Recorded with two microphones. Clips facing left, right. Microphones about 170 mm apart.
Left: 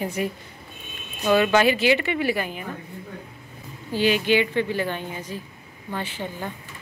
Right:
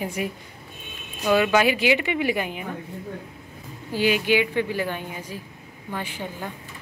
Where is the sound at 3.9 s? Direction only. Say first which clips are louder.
Left 1 dB; 10° right (ahead or behind).